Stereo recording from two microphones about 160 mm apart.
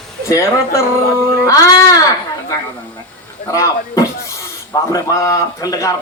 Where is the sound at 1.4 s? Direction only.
20° left (ahead or behind).